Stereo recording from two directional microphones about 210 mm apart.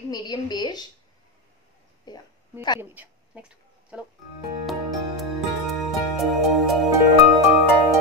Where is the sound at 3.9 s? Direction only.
5° right (ahead or behind).